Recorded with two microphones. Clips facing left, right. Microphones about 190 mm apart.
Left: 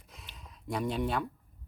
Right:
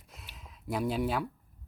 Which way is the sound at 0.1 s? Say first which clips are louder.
Even; centre (ahead or behind).